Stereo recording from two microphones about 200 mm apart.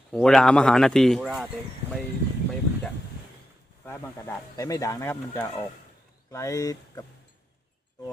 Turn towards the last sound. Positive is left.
turn(degrees=15)  # may be behind; listen again after turning